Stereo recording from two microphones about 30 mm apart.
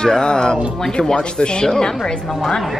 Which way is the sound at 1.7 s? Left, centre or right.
Centre.